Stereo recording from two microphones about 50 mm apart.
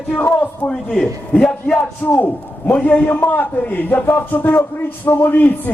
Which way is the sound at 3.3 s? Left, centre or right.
Left.